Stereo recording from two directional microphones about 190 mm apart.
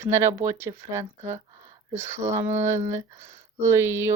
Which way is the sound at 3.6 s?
15° right (ahead or behind).